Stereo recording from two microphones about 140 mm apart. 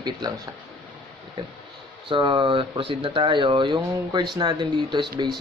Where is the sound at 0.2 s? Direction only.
30° right (ahead or behind).